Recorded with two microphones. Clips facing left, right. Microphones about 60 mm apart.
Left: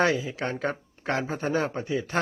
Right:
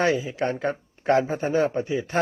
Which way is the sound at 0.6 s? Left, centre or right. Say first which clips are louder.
Right 5 dB; left.